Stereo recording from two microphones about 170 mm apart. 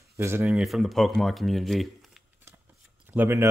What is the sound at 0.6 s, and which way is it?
Speech, centre (ahead or behind).